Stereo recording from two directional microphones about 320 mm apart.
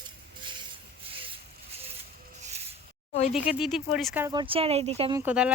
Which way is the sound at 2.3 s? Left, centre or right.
Right.